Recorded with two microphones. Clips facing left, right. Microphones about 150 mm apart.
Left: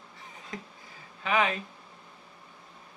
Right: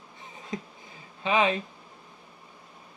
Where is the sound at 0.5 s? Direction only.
20° right (ahead or behind).